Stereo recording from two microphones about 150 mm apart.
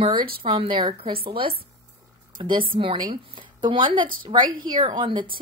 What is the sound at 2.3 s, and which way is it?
A woman's voice, 30° right (ahead or behind).